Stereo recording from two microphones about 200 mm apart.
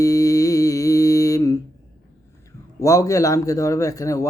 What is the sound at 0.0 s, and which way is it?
Mantra, 15° left (ahead or behind).